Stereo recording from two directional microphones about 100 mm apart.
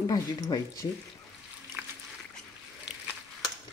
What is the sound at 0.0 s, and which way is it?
Speech, 45° left (ahead or behind).